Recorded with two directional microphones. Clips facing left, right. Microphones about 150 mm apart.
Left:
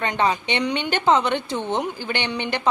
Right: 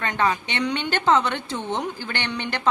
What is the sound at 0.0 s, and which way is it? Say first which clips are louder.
A woman's voice: left 2 dB; 20° left (ahead or behind).